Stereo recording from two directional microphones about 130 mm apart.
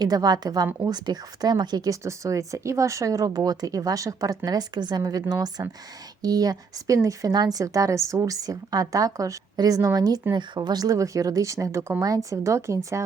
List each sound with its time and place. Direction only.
0.0 s a woman's voice: 30° right (ahead or behind)